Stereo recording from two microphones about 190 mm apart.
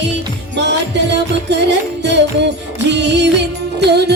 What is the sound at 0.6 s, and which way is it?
Music, 65° right (ahead or behind).